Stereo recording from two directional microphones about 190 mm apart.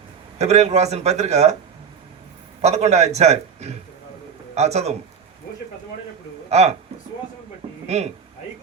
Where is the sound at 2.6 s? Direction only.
35° right (ahead or behind).